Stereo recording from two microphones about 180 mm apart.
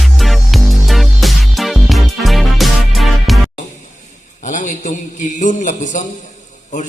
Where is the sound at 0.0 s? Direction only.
Centre (ahead or behind).